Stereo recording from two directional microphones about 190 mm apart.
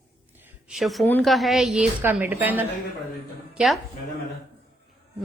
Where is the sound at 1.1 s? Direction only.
5° left (ahead or behind).